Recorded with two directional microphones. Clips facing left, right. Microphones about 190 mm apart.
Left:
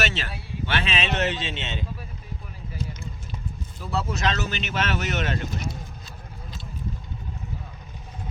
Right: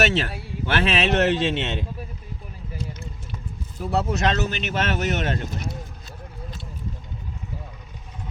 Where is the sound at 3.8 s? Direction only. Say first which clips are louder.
Right 5 dB; 60° right (ahead or behind).